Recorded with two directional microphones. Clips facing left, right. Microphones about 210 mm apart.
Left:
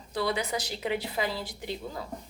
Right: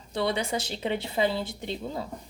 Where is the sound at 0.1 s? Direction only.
25° right (ahead or behind).